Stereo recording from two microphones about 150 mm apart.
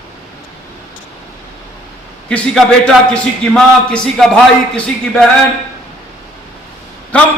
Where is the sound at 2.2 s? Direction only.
5° left (ahead or behind).